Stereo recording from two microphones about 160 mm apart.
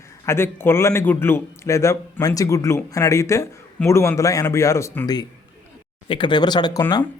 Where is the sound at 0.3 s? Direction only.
15° left (ahead or behind).